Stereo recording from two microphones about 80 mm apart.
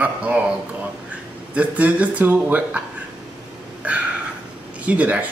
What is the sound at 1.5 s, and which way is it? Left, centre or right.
Speech, centre.